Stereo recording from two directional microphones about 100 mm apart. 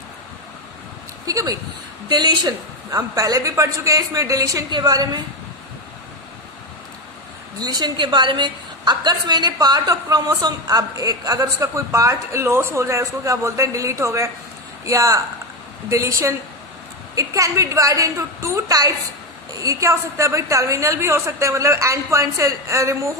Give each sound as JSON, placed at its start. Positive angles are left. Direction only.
{"t": 1.3, "sound": "a woman's voice", "side_deg": -35}
{"t": 2.0, "sound": "a woman's voice", "side_deg": -45}
{"t": 7.6, "sound": "a woman's voice", "side_deg": -45}